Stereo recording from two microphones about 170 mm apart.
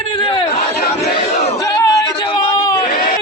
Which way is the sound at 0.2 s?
30° left (ahead or behind).